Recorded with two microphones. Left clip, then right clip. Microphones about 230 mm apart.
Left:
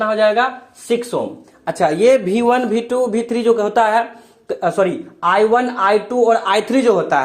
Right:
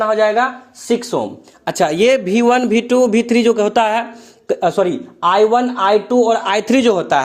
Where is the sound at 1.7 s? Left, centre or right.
Right.